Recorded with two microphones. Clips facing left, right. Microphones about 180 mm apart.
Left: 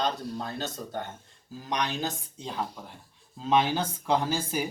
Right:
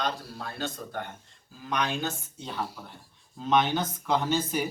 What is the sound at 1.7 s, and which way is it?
Speech, 35° left (ahead or behind).